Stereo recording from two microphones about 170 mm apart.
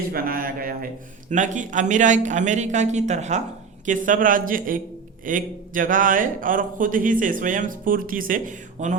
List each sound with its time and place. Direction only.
0.1 s speech: 60° right (ahead or behind)
1.3 s speech: 45° right (ahead or behind)